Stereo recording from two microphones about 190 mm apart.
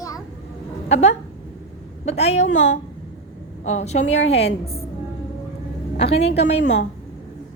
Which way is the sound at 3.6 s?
35° left (ahead or behind).